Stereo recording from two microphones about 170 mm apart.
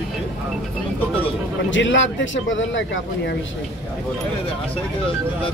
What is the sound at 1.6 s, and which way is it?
A man's voice, 90° left.